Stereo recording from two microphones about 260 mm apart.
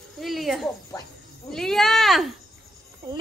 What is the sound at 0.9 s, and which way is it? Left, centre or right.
Speech, centre.